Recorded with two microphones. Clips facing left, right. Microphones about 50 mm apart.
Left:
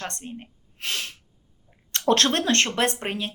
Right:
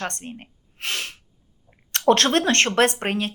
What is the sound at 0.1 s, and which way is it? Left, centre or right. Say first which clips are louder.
A woman's voice: right 1 dB; right.